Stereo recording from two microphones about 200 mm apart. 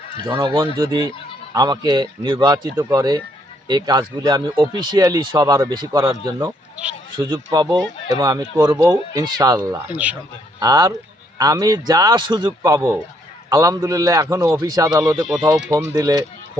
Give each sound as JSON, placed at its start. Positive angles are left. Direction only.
{"t": 0.4, "sound": "a man's voice", "side_deg": -20}